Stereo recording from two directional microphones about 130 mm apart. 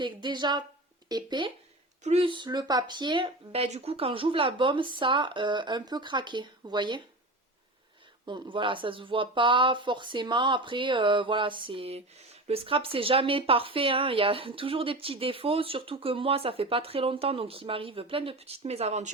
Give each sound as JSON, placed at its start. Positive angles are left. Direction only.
{"t": 0.0, "sound": "speech", "side_deg": -35}
{"t": 8.2, "sound": "speech", "side_deg": -40}